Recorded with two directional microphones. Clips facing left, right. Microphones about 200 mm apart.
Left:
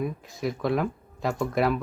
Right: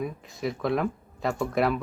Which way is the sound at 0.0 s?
Centre (ahead or behind).